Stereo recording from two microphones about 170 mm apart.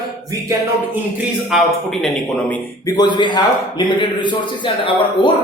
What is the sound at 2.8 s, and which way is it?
A man's voice, 25° left (ahead or behind).